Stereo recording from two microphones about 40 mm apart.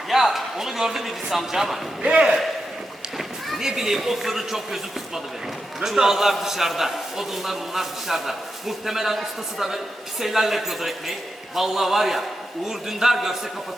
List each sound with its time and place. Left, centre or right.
0.1 s a man's voice: centre
2.0 s a man's voice: right
3.2 s a man's voice: centre